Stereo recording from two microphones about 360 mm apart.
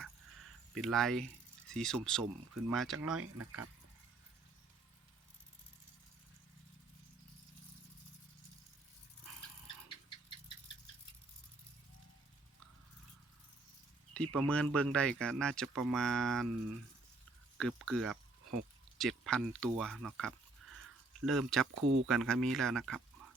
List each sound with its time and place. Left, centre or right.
0.7 s speech: centre
3.2 s speech: right
14.1 s speech: centre
17.8 s speech: centre
21.8 s speech: right
22.0 s speech: centre